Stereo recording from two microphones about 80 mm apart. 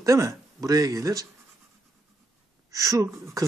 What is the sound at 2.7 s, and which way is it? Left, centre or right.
Speech, right.